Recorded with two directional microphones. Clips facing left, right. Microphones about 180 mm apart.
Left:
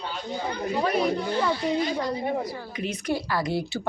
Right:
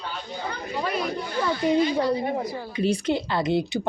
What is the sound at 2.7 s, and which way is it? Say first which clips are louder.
Speech: right 5 dB; 30° right (ahead or behind).